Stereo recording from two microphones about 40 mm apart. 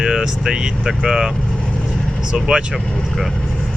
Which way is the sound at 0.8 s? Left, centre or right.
Centre.